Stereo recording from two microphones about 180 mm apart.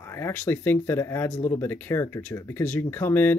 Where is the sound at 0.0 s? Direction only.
15° left (ahead or behind).